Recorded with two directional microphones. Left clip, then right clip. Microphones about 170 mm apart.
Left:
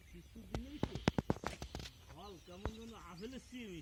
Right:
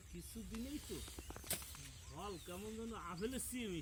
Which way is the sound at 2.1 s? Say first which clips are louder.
Right 10 dB; 25° left (ahead or behind).